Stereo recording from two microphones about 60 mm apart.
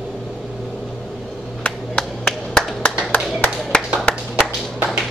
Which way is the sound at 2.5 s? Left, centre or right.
Centre.